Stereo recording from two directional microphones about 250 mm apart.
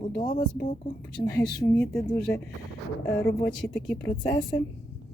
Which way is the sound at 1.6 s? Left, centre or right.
Centre.